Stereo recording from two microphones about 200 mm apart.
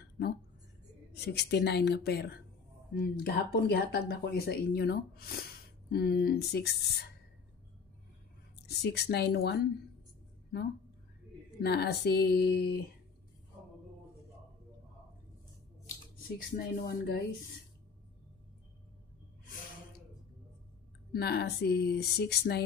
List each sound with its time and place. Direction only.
1.1 s speech: 55° left (ahead or behind)
8.6 s speech: 55° left (ahead or behind)
11.6 s speech: 55° left (ahead or behind)
16.3 s speech: 45° left (ahead or behind)
21.1 s speech: 55° left (ahead or behind)